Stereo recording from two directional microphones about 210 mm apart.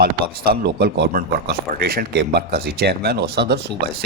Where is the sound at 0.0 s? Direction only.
50° right (ahead or behind).